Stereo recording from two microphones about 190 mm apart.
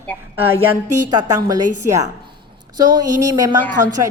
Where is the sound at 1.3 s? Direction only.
15° right (ahead or behind).